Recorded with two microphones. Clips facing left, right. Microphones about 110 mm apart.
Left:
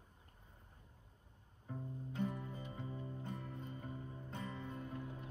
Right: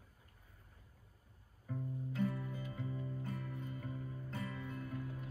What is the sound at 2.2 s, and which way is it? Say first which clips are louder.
Music: right 2 dB; 25° left (ahead or behind).